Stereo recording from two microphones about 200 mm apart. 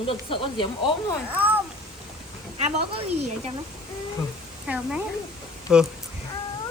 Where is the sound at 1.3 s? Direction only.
10° right (ahead or behind).